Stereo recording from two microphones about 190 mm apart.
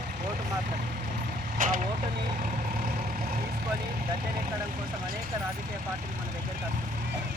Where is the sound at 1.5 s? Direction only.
45° right (ahead or behind).